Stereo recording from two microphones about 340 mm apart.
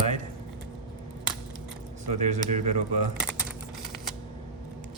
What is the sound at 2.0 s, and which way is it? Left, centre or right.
Speech, right.